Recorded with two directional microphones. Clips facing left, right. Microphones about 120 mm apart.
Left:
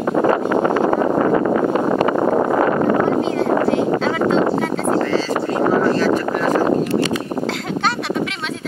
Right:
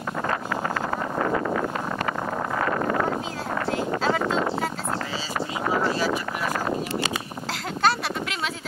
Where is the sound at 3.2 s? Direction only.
Centre (ahead or behind).